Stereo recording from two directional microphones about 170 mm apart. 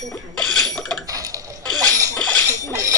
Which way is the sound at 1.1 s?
20° right (ahead or behind).